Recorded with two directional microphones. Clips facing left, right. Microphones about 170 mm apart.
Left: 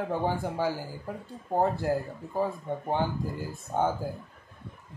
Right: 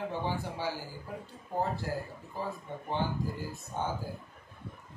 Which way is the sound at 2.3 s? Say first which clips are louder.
Left 9 dB; 50° left (ahead or behind).